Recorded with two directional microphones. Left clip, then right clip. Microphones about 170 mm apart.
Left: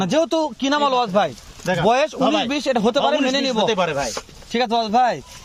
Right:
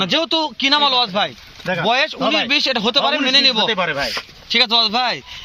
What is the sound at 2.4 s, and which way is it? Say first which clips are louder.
Speech: right 3 dB; 60° left (ahead or behind).